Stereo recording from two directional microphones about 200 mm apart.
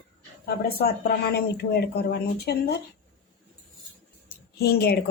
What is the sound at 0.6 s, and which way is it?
Speech, 55° left (ahead or behind).